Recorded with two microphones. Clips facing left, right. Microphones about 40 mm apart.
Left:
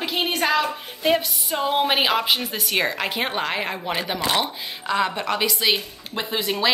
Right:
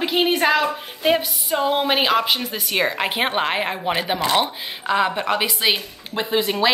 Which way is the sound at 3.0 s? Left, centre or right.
Right.